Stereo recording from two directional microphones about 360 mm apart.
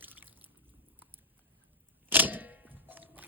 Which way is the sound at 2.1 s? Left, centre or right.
Centre.